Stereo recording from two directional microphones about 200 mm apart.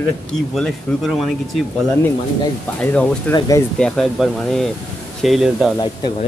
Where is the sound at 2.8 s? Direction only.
5° left (ahead or behind).